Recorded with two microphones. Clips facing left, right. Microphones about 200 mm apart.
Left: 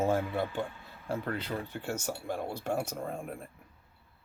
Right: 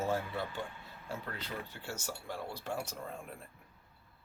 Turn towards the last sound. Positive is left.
turn(degrees=45)  # may be behind; listen again after turning